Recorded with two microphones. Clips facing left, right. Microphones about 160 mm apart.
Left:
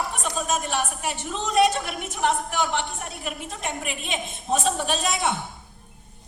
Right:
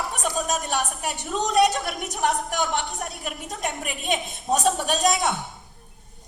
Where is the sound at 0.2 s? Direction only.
40° right (ahead or behind).